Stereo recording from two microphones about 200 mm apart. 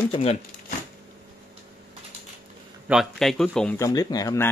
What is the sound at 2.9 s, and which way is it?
Speech, centre (ahead or behind).